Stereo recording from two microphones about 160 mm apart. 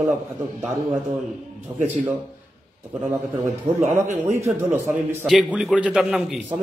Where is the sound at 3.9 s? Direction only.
15° right (ahead or behind).